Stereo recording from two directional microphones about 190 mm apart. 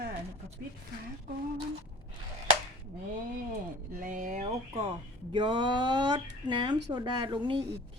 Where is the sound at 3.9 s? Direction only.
45° right (ahead or behind); by 7.6 s 25° right (ahead or behind).